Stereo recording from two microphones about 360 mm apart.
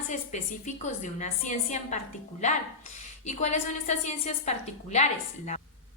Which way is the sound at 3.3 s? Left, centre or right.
Centre.